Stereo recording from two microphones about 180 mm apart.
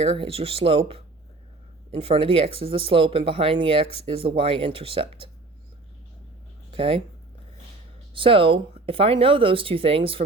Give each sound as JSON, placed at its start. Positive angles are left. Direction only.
{"t": 0.0, "sound": "speech", "side_deg": -30}
{"t": 6.7, "sound": "speech", "side_deg": -30}
{"t": 8.1, "sound": "speech", "side_deg": -30}